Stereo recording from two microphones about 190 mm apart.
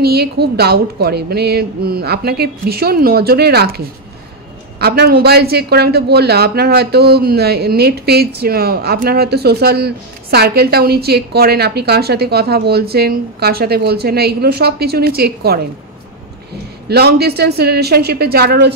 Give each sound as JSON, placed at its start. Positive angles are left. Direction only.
{"t": 0.0, "sound": "a man's voice", "side_deg": -55}
{"t": 16.9, "sound": "a man's voice", "side_deg": -60}